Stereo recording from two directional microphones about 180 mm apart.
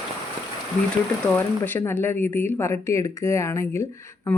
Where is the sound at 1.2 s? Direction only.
10° left (ahead or behind).